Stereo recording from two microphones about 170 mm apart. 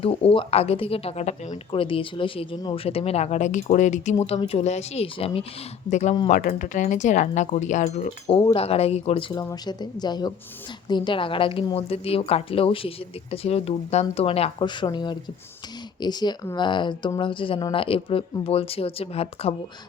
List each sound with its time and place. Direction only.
0.0 s speech: 35° left (ahead or behind)
9.3 s a woman's voice: 20° left (ahead or behind)